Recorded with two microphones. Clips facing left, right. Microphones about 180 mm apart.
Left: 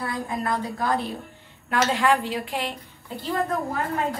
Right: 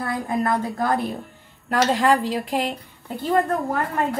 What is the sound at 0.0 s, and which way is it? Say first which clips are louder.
A woman's voice: right 5 dB; 45° right (ahead or behind).